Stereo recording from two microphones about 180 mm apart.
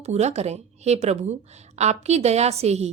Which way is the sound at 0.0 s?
40° right (ahead or behind).